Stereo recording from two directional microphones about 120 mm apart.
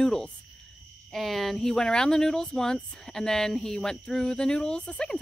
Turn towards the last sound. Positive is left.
turn(degrees=5)  # may be behind; listen again after turning